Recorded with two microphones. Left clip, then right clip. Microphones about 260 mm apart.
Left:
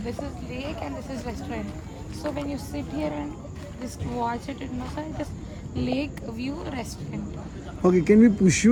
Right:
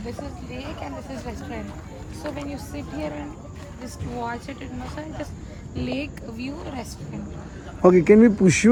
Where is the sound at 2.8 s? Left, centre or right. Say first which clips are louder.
Left 1 dB; centre.